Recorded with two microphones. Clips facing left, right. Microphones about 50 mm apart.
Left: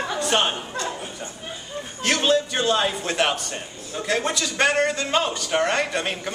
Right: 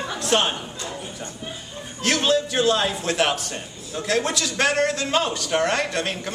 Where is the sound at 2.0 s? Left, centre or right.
Centre.